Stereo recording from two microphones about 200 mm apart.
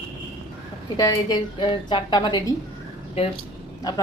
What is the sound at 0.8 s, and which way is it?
A woman's voice, 20° left (ahead or behind).